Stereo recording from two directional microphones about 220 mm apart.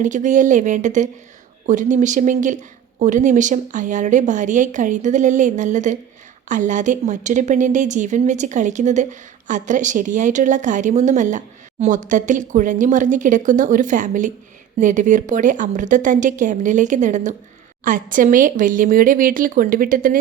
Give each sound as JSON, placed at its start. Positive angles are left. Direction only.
{"t": 0.0, "sound": "a woman's voice", "side_deg": -35}